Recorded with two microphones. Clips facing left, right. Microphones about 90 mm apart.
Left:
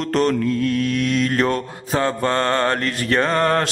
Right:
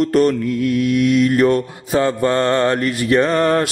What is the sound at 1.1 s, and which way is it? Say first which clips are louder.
Mantra: right 7 dB; 35° left (ahead or behind).